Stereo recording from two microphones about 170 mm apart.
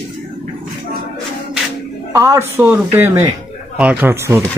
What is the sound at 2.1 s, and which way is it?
A man's voice, 20° right (ahead or behind).